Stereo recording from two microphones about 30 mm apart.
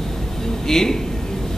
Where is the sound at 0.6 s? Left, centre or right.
Centre.